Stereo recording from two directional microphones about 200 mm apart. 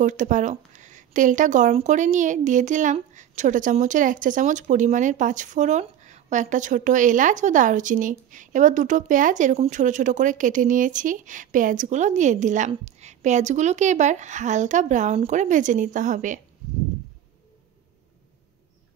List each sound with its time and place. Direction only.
0.0 s speech: 40° right (ahead or behind)